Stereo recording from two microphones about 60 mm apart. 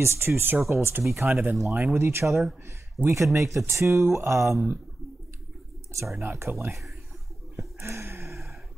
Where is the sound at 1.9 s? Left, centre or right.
Right.